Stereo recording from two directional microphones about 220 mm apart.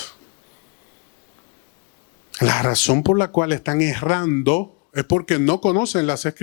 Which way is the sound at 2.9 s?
25° left (ahead or behind).